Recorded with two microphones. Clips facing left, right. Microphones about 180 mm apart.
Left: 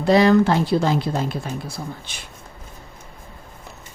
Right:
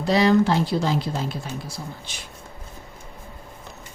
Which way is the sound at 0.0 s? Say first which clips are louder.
Left 3 dB; 55° left (ahead or behind).